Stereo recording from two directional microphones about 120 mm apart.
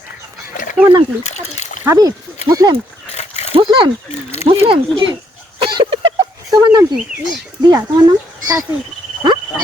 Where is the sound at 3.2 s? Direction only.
65° left (ahead or behind).